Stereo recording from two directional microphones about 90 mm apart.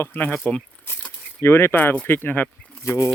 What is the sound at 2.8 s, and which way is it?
Speech, 35° left (ahead or behind).